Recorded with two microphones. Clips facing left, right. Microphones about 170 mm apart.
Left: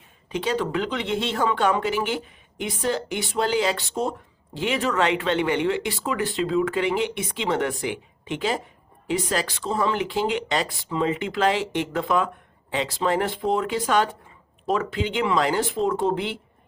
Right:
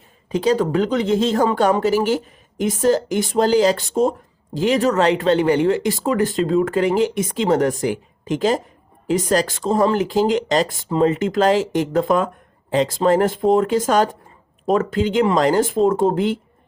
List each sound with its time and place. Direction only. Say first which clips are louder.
0.3 s speech: right 7 dB; 40° right (ahead or behind)